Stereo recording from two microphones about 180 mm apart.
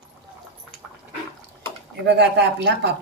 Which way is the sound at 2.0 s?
70° right (ahead or behind).